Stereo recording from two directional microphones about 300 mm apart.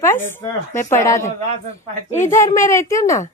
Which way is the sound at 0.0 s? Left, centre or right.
Centre.